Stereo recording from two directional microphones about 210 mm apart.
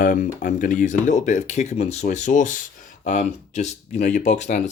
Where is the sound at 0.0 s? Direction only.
40° left (ahead or behind).